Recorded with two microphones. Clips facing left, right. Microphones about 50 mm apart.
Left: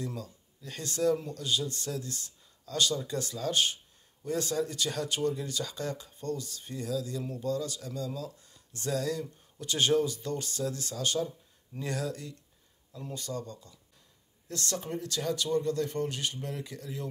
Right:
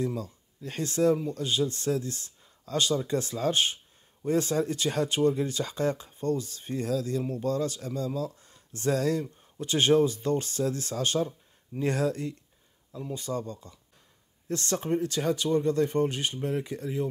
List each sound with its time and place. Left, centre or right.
0.0 s speech: right
12.9 s speech: centre